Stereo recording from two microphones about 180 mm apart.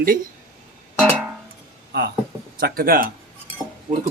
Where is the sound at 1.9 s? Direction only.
65° right (ahead or behind).